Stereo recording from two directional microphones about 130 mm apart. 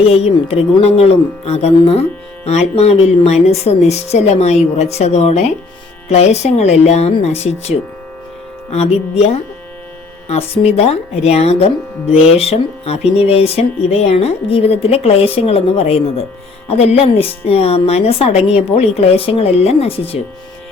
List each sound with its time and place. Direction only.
0.1 s speech: 50° left (ahead or behind)
10.2 s speech: 50° left (ahead or behind)